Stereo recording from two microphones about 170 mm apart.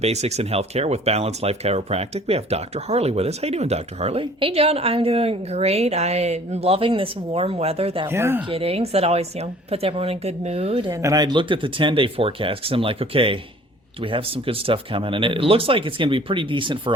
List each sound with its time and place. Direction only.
0.0 s speech: 40° right (ahead or behind)
8.0 s speech: 15° right (ahead or behind)
8.4 s speech: 35° right (ahead or behind)
10.9 s speech: 20° right (ahead or behind)